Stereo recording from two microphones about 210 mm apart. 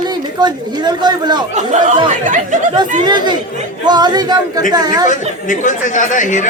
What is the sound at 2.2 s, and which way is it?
Speech, 40° right (ahead or behind).